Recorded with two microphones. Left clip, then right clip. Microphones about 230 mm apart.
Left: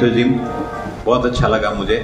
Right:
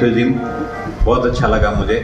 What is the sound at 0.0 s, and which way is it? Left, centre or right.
Speech, centre.